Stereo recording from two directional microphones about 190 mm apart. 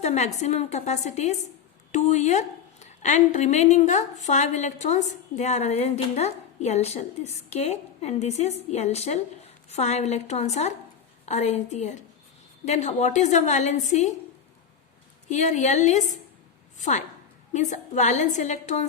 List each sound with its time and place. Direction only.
0.0 s a woman's voice: 35° left (ahead or behind)
15.3 s a woman's voice: 40° left (ahead or behind)